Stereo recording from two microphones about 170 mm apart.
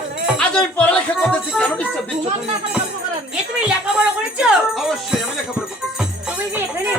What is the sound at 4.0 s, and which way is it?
Speech, 5° right (ahead or behind).